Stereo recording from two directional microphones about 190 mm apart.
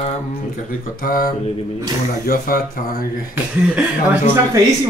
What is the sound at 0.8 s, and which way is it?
Speech, 45° left (ahead or behind).